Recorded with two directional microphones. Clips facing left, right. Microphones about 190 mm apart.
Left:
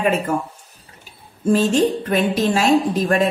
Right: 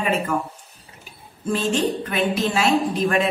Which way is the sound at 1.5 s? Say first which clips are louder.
Left 6 dB; 40° left (ahead or behind).